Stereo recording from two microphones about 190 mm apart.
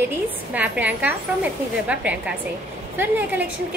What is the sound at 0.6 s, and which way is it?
Speech, 10° right (ahead or behind).